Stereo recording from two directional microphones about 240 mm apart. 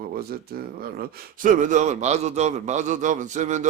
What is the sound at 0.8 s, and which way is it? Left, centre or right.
A man's voice, right.